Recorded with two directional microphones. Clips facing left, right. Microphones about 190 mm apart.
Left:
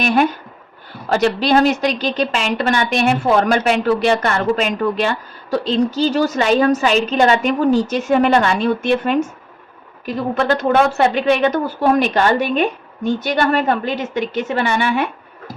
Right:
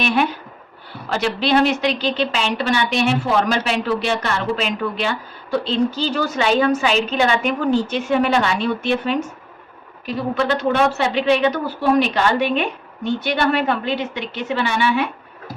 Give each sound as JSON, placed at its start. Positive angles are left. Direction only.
{"t": 0.0, "sound": "speech", "side_deg": 45}
{"t": 10.4, "sound": "speech", "side_deg": 50}